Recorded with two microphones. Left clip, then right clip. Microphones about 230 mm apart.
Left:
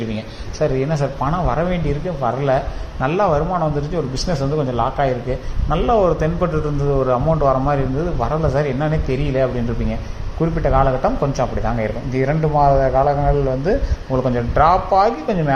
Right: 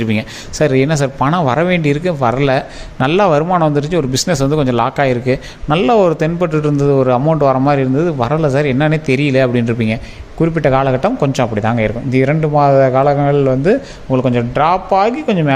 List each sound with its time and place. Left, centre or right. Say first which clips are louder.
0.1 s a man's voice: right 8 dB; right